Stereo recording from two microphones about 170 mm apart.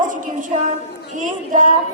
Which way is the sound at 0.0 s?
50° right (ahead or behind).